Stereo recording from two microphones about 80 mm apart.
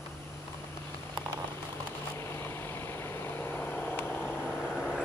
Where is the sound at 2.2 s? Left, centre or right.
Left.